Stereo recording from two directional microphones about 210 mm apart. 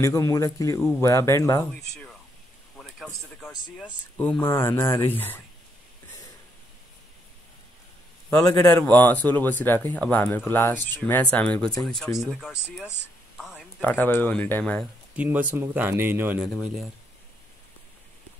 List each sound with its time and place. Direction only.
0.0 s speech: 15° left (ahead or behind)
8.3 s speech: 15° left (ahead or behind)
15.1 s speech: 10° right (ahead or behind)